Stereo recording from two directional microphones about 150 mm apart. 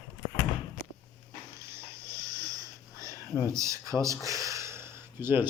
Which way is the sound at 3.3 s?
20° left (ahead or behind).